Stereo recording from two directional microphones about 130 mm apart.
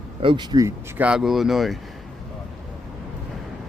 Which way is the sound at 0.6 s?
10° right (ahead or behind).